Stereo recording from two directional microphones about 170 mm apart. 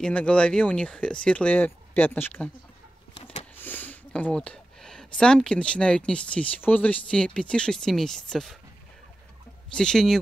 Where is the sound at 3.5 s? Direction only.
10° left (ahead or behind).